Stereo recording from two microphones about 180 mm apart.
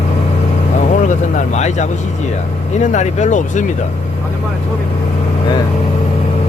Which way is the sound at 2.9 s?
40° left (ahead or behind).